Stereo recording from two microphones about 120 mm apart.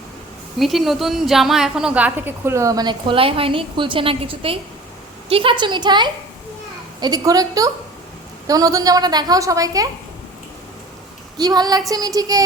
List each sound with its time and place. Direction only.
0.6 s a woman's voice: centre (ahead or behind); by 9.9 s 30° right (ahead or behind)
11.3 s a woman's voice: 35° right (ahead or behind)